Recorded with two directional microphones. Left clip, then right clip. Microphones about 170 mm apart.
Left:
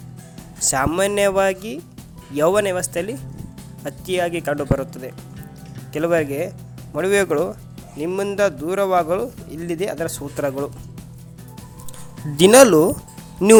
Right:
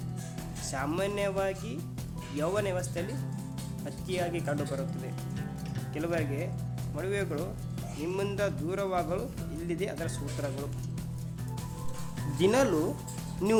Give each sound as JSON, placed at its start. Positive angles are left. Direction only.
{"t": 0.7, "sound": "speech", "side_deg": 60}
{"t": 12.4, "sound": "speech", "side_deg": 65}
{"t": 13.4, "sound": "speech", "side_deg": 45}